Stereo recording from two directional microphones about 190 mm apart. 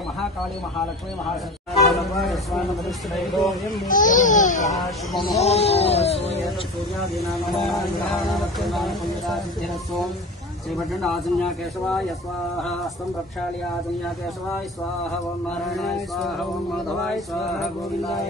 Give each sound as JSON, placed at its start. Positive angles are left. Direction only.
{"t": 1.9, "sound": "speech", "side_deg": 0}
{"t": 3.9, "sound": "speech", "side_deg": 45}
{"t": 4.7, "sound": "speech", "side_deg": 0}
{"t": 5.4, "sound": "cat", "side_deg": 35}
{"t": 7.2, "sound": "speech", "side_deg": 0}
{"t": 10.7, "sound": "speech", "side_deg": 0}
{"t": 15.7, "sound": "speech", "side_deg": 0}